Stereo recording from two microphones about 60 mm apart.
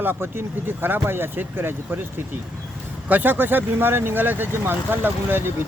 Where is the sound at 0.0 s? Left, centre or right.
Right.